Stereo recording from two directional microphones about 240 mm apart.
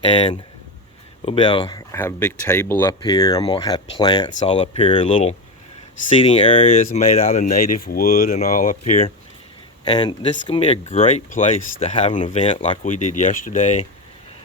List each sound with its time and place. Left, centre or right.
0.0 s speech: left
1.9 s speech: centre; by 13.8 s left